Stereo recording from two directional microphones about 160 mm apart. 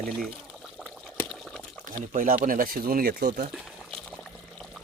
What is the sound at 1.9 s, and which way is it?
Speech, 60° right (ahead or behind).